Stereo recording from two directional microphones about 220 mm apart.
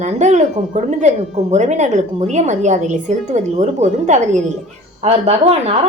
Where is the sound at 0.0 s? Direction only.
30° right (ahead or behind).